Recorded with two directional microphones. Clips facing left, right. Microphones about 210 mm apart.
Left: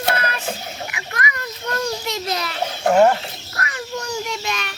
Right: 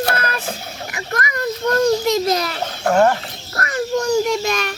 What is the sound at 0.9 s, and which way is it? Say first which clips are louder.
Children playing: right 7 dB; 45° right (ahead or behind).